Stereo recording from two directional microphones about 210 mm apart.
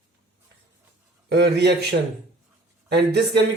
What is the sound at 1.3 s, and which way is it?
Speech, 50° right (ahead or behind).